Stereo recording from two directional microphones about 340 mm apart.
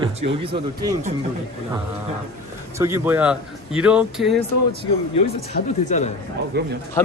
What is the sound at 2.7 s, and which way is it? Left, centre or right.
Speech, centre.